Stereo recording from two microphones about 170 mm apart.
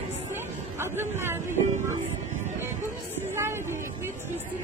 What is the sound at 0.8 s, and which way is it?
Speech, 15° right (ahead or behind).